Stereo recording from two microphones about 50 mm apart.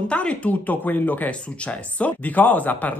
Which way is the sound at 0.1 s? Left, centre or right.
Left.